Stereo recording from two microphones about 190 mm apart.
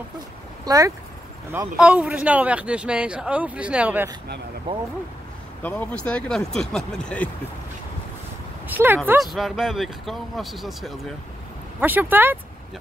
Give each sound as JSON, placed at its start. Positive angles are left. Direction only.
{"t": 0.7, "sound": "speech", "side_deg": -15}
{"t": 5.6, "sound": "speech", "side_deg": 10}
{"t": 8.6, "sound": "speech", "side_deg": -10}
{"t": 9.2, "sound": "speech", "side_deg": 0}